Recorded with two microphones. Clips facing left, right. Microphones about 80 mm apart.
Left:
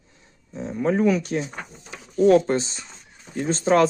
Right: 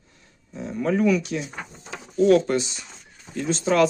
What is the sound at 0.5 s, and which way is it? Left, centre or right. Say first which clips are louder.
Speech: left 1 dB; left.